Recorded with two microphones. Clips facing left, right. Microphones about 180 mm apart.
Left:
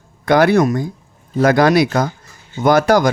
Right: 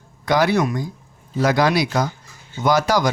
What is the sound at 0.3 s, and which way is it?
Speech, 55° left (ahead or behind).